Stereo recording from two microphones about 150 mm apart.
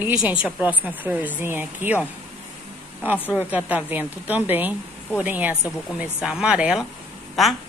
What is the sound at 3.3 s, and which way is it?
Speech, 10° right (ahead or behind).